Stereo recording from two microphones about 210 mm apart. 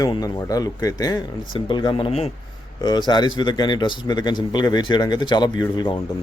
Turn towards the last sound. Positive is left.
turn(degrees=20)  # may be behind; listen again after turning